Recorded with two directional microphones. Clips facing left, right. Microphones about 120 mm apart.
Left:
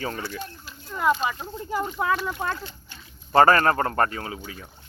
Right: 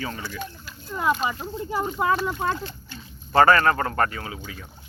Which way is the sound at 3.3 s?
35° left (ahead or behind).